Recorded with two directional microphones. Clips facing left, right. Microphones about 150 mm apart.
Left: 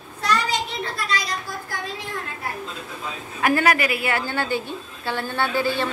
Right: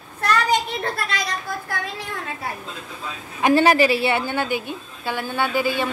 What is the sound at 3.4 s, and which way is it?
A woman's voice, 30° right (ahead or behind).